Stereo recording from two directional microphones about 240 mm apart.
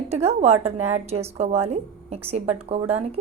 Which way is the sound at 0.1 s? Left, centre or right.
Right.